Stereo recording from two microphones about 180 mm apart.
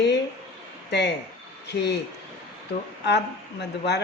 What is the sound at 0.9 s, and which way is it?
A woman's voice, 70° left (ahead or behind).